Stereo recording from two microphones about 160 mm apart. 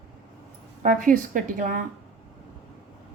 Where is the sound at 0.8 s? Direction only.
55° right (ahead or behind).